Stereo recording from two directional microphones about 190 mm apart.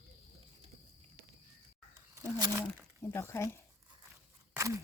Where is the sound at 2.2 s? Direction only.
20° right (ahead or behind).